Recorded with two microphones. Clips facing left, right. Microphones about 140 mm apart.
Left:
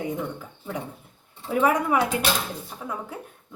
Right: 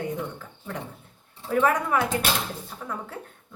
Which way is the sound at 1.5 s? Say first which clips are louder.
Left 1 dB; 10° left (ahead or behind).